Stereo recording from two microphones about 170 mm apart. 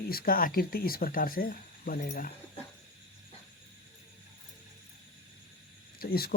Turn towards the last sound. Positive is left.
turn(degrees=65)  # may be behind; listen again after turning